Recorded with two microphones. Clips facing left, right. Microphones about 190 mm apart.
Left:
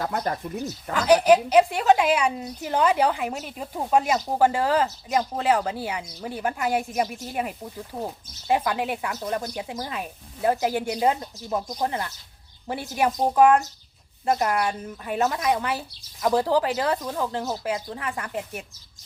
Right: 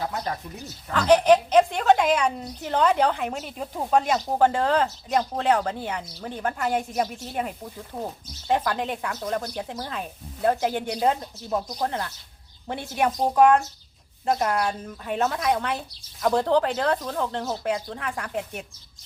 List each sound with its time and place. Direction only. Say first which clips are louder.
0.1 s speech: left 4 dB; 50° left (ahead or behind)
0.9 s a woman's voice: even; 5° left (ahead or behind)